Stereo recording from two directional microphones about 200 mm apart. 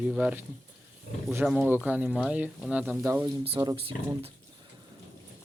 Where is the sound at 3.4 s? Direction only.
30° right (ahead or behind).